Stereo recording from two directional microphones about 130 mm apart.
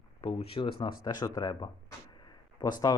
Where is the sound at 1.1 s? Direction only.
30° left (ahead or behind).